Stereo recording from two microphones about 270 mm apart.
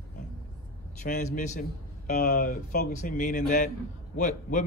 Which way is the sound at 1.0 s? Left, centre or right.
Left.